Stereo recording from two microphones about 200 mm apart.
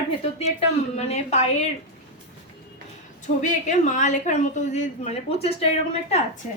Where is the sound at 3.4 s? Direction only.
40° left (ahead or behind).